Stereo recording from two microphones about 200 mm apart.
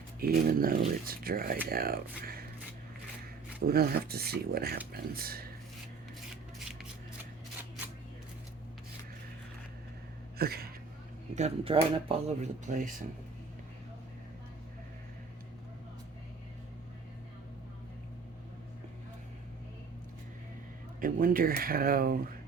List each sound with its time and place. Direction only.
0.2 s speech: 45° right (ahead or behind)
3.6 s speech: 50° right (ahead or behind)
6.3 s shuffling cards: centre (ahead or behind)
10.3 s a sound: 50° right (ahead or behind)
11.3 s speech: 30° right (ahead or behind)
21.0 s speech: 45° right (ahead or behind)